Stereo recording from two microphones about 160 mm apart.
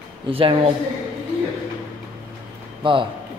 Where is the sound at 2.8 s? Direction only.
30° right (ahead or behind).